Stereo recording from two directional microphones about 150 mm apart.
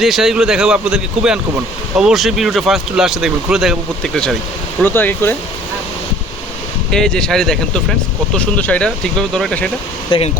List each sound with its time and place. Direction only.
0.0 s speech: centre (ahead or behind)
6.9 s speech: 5° left (ahead or behind)
10.1 s speech: 40° left (ahead or behind)